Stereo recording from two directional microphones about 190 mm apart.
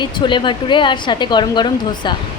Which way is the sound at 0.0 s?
25° left (ahead or behind).